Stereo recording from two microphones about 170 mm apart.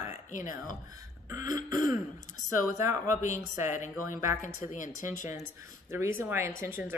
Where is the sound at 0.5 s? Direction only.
25° right (ahead or behind).